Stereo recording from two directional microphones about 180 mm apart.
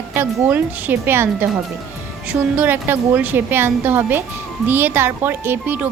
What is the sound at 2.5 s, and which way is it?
Speech, 10° right (ahead or behind).